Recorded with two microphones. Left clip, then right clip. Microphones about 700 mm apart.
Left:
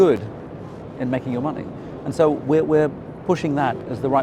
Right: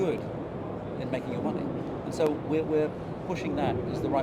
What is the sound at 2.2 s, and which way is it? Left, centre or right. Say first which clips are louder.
A man's voice: left 10 dB; left.